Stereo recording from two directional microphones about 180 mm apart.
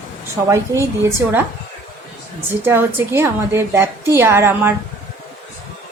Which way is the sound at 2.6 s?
10° right (ahead or behind).